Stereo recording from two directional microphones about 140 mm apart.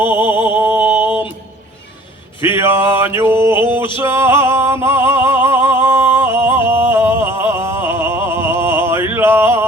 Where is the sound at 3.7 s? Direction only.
20° right (ahead or behind).